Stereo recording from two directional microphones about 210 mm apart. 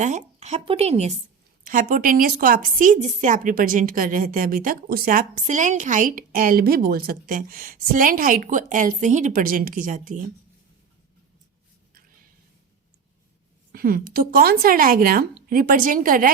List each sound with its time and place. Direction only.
0.0 s a woman's voice: 35° right (ahead or behind)
13.7 s a woman's voice: 45° right (ahead or behind)